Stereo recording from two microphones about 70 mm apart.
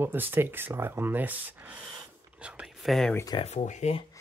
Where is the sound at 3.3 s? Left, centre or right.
Left.